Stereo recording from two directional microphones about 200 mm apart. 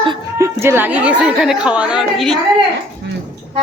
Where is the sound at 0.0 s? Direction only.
20° right (ahead or behind); by 2.4 s centre (ahead or behind).